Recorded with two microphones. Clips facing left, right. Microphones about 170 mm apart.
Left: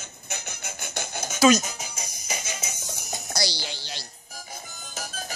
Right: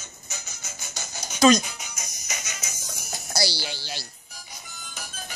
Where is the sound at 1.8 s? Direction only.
30° left (ahead or behind).